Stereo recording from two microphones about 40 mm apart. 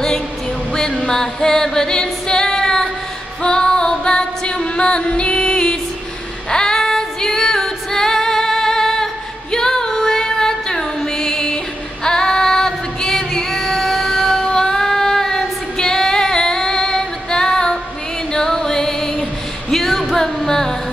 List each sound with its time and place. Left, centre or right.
0.7 s singing: centre
3.4 s female singing: left
18.3 s music: centre